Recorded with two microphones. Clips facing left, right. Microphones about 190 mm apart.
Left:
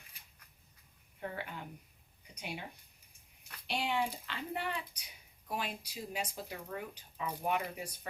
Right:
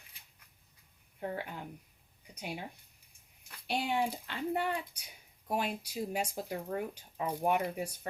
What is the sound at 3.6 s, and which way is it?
Speech, 45° right (ahead or behind).